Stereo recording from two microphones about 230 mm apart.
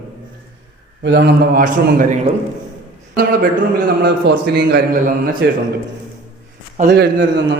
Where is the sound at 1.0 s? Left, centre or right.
Right.